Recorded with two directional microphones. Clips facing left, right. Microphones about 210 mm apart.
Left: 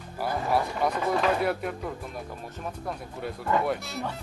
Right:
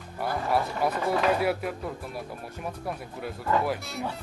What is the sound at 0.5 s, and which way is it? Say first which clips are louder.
Speech: even; 5° right (ahead or behind).